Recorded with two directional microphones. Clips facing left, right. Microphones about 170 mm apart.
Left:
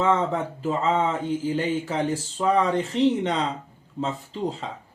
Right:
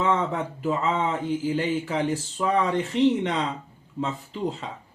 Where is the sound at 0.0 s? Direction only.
35° left (ahead or behind).